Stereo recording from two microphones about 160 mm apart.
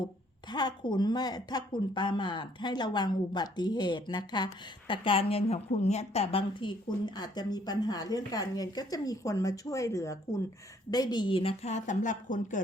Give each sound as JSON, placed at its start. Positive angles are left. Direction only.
{"t": 0.4, "sound": "a woman's voice", "side_deg": 25}